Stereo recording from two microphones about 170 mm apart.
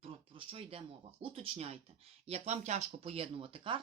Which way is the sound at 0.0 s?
35° right (ahead or behind).